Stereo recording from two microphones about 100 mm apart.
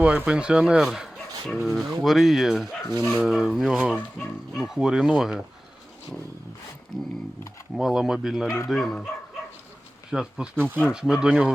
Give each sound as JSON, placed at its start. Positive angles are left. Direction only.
{"t": 0.0, "sound": "speech", "side_deg": -15}
{"t": 2.9, "sound": "speech", "side_deg": 25}
{"t": 3.2, "sound": "speech", "side_deg": -5}
{"t": 4.2, "sound": "speech", "side_deg": 10}
{"t": 4.5, "sound": "speech", "side_deg": -5}
{"t": 7.8, "sound": "speech", "side_deg": -5}
{"t": 10.1, "sound": "speech", "side_deg": -5}